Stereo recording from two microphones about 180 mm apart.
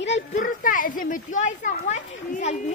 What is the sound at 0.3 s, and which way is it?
Speech, 45° left (ahead or behind).